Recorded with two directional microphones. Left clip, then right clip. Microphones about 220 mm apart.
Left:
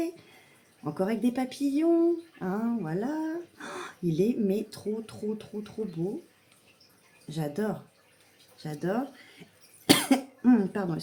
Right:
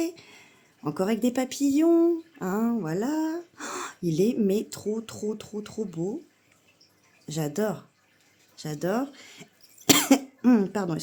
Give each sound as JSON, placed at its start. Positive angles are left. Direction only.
{"t": 0.9, "sound": "speech", "side_deg": -50}
{"t": 7.3, "sound": "speech", "side_deg": -50}
{"t": 9.8, "sound": "cough", "side_deg": -50}